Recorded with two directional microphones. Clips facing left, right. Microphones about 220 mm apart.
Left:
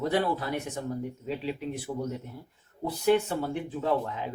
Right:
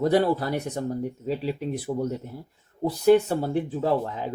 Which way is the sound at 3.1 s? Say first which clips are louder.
Right 6 dB; 40° right (ahead or behind).